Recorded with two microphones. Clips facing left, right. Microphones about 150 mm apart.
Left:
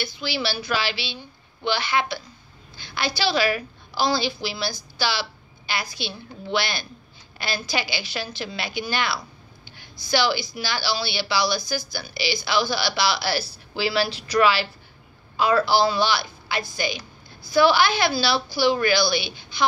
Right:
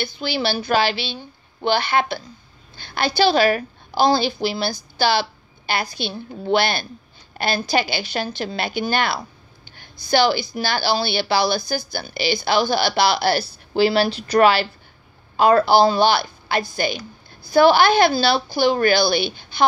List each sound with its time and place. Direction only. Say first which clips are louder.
0.0 s a woman's voice: right 4 dB; 50° right (ahead or behind)